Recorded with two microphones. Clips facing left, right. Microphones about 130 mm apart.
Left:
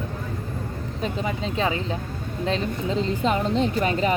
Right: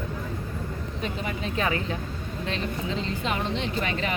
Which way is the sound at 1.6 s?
25° left (ahead or behind).